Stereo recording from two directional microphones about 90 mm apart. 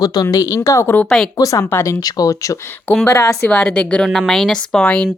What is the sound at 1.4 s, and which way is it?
Speech, 40° left (ahead or behind).